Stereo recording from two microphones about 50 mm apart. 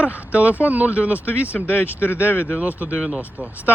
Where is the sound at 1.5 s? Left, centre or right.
Left.